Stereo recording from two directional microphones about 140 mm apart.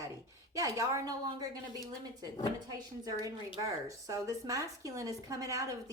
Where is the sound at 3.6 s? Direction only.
25° right (ahead or behind).